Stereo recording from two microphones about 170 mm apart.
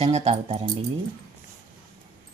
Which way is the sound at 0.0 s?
40° right (ahead or behind).